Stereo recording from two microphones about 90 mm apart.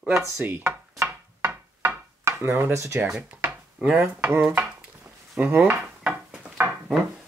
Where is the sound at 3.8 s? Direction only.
15° right (ahead or behind).